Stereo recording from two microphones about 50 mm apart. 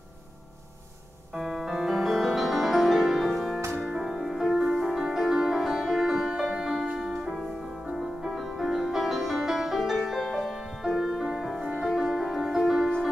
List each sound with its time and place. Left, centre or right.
1.3 s music: centre
3.8 s music: centre
6.6 s music: centre
11.6 s music: right
11.9 s music: centre